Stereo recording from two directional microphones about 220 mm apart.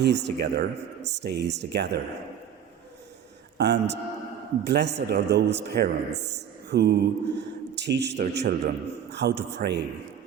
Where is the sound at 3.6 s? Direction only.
50° right (ahead or behind).